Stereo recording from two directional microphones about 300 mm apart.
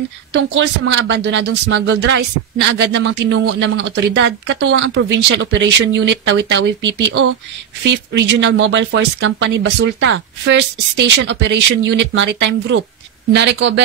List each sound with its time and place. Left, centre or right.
0.3 s speech: right